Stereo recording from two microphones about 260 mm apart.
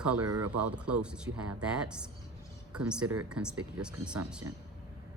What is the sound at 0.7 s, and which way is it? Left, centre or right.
A woman's voice, centre.